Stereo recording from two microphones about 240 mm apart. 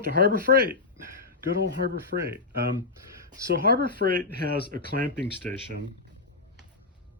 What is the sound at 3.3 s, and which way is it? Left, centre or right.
Speech, right.